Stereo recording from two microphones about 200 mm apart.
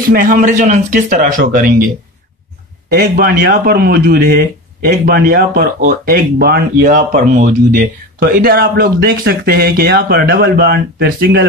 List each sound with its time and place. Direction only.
0.0 s speech: 45° right (ahead or behind)
2.9 s speech: 50° right (ahead or behind)